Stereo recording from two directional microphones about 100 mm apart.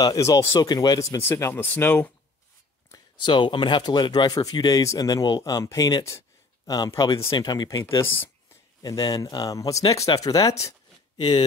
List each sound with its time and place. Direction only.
0.0 s speech: 35° left (ahead or behind)
1.2 s speech: 25° left (ahead or behind)
3.3 s speech: 50° left (ahead or behind)
7.9 s speech: 25° left (ahead or behind)
8.8 s speech: 40° left (ahead or behind)